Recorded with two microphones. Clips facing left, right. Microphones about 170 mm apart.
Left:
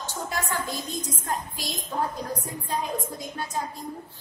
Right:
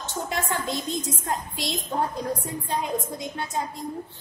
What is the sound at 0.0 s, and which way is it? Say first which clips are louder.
A woman's voice: right 2 dB; 20° right (ahead or behind).